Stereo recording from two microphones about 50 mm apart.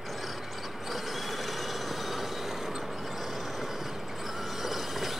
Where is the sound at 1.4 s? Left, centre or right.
Centre.